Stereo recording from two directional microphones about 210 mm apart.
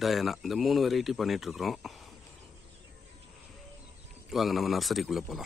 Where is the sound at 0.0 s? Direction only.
Centre (ahead or behind).